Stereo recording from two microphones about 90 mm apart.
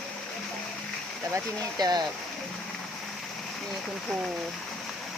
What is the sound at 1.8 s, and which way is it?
Speech, 50° right (ahead or behind).